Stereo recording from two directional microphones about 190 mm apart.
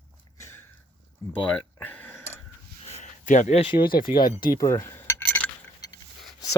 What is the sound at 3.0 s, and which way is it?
Speech, 40° left (ahead or behind).